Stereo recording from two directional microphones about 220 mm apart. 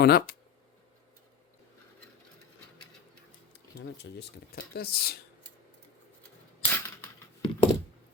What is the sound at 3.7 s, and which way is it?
Speech, 50° left (ahead or behind).